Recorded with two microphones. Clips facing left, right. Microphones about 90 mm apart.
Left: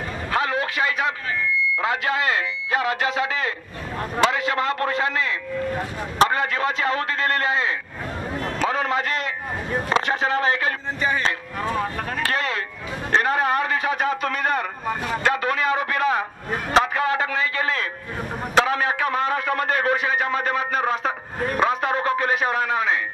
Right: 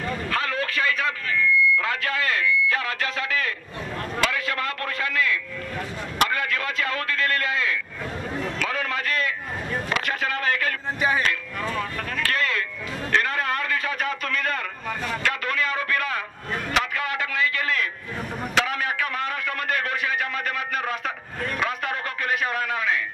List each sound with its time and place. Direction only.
0.3 s a sound: 20° left (ahead or behind)
4.2 s a man's voice: 25° left (ahead or behind)
11.0 s speech: 5° right (ahead or behind)
11.2 s a man's voice: 30° left (ahead or behind)